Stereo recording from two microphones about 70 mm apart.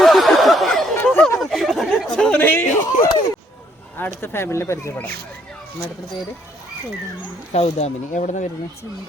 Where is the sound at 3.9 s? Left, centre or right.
Left.